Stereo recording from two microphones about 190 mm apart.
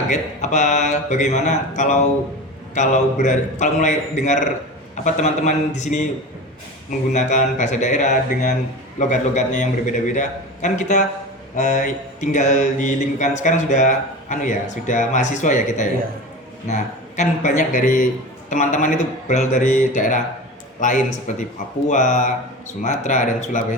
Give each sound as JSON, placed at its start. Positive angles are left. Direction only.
{"t": 0.1, "sound": "mantra", "side_deg": 40}
{"t": 7.1, "sound": "mantra", "side_deg": 40}